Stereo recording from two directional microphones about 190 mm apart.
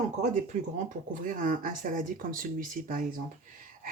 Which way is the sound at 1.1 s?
45° right (ahead or behind).